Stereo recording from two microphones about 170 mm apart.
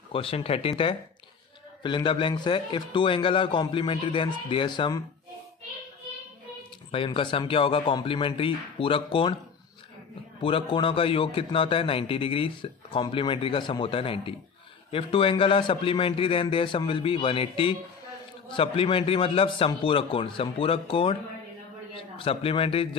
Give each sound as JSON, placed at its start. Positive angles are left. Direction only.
{"t": 0.1, "sound": "a man's voice", "side_deg": 35}
{"t": 6.9, "sound": "a man's voice", "side_deg": 30}
{"t": 10.4, "sound": "a man's voice", "side_deg": 30}